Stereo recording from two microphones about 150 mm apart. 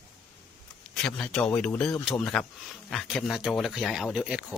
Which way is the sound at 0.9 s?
5° left (ahead or behind).